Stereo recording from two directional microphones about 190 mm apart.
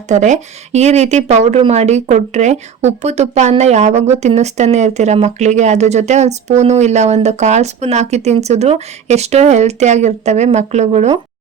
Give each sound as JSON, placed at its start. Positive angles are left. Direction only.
{"t": 0.1, "sound": "speech", "side_deg": -40}